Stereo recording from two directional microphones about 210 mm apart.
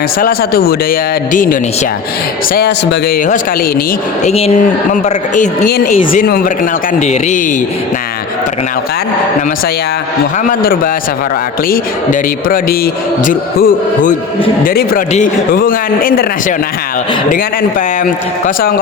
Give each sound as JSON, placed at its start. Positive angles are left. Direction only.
{"t": 0.2, "sound": "speech", "side_deg": 45}
{"t": 2.6, "sound": "speech", "side_deg": 55}
{"t": 4.2, "sound": "speech", "side_deg": 30}
{"t": 12.5, "sound": "speech", "side_deg": 45}
{"t": 17.7, "sound": "speech", "side_deg": 40}